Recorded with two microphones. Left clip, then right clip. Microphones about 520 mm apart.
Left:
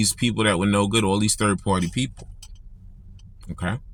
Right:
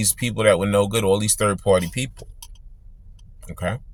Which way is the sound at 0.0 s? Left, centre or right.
Right.